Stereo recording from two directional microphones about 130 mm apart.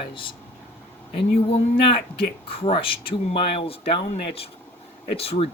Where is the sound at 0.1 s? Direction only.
40° left (ahead or behind).